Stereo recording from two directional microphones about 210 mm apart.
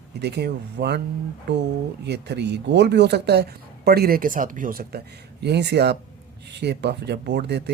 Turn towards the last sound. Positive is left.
turn(degrees=-55)  # may be behind; listen again after turning